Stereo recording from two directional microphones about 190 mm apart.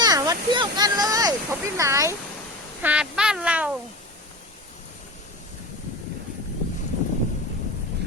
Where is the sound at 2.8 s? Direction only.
5° right (ahead or behind).